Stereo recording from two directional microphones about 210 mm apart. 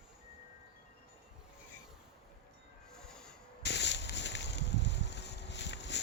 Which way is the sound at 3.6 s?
55° left (ahead or behind).